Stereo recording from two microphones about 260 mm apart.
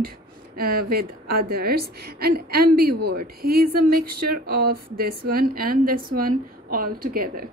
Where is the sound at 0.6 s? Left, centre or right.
Right.